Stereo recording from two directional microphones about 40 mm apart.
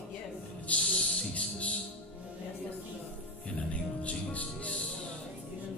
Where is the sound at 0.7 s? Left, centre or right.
Left.